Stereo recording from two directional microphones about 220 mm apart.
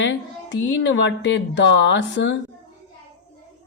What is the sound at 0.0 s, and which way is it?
Speech, 55° left (ahead or behind).